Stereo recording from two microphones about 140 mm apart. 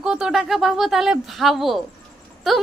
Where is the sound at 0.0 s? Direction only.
5° right (ahead or behind).